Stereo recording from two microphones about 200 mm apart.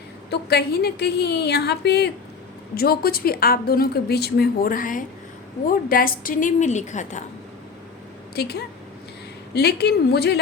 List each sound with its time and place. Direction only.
0.3 s a woman's voice: 55° left (ahead or behind); by 7.3 s 35° left (ahead or behind)
8.4 s a woman's voice: 55° left (ahead or behind)